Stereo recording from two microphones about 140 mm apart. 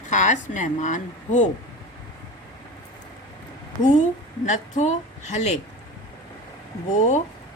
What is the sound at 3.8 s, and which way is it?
A woman's voice, 60° left (ahead or behind).